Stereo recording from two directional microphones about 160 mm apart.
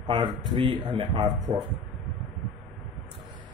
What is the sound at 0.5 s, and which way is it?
Speech, 30° right (ahead or behind).